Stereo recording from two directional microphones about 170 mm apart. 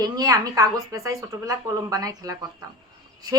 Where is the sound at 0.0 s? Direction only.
20° right (ahead or behind).